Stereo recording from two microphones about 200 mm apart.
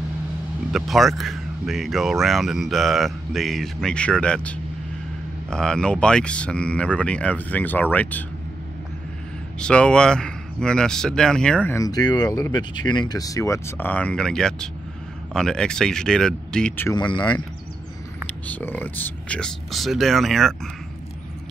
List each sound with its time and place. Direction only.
0.7 s speech: centre (ahead or behind)
9.6 s speech: 5° left (ahead or behind)
16.9 s speech: 25° left (ahead or behind)
18.2 s speech: 10° left (ahead or behind)